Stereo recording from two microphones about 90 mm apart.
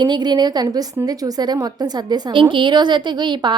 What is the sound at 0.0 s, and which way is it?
A woman's voice, 55° right (ahead or behind).